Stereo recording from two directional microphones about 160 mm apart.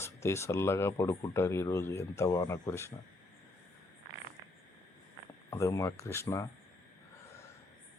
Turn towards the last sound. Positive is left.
turn(degrees=20)  # may be behind; listen again after turning